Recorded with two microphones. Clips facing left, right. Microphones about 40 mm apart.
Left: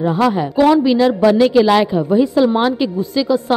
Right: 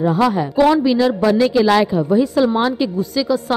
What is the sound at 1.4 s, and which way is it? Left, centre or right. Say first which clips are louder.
A woman's voice: even; left.